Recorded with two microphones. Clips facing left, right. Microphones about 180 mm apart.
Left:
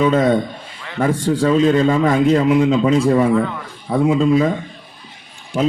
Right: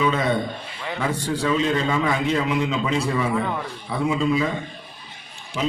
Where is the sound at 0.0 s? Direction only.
45° left (ahead or behind).